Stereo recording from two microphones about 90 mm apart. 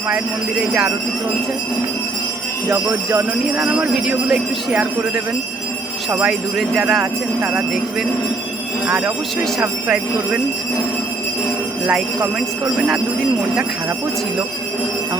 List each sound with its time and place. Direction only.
3.6 s speech: 10° right (ahead or behind)
6.2 s speech: 5° right (ahead or behind)
7.0 s speech: 25° right (ahead or behind)